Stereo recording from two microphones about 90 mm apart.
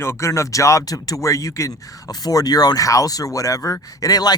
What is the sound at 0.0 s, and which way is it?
Speech, 30° left (ahead or behind).